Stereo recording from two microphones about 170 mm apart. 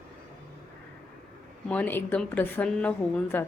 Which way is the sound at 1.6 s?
10° left (ahead or behind).